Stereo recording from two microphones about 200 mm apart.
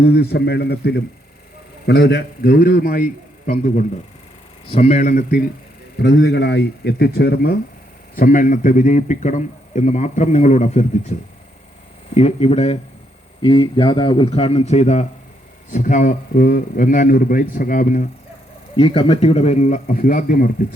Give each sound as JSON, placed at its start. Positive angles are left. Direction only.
{"t": 0.0, "sound": "a man's voice", "side_deg": 55}
{"t": 6.0, "sound": "a man's voice", "side_deg": 55}
{"t": 18.8, "sound": "a man's voice", "side_deg": 25}